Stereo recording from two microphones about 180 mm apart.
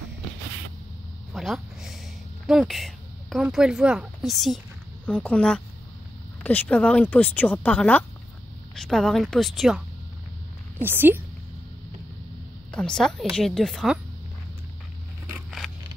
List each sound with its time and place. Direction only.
1.3 s a sound: centre (ahead or behind)
2.4 s a woman's voice: centre (ahead or behind)
12.7 s a woman's voice: 5° left (ahead or behind)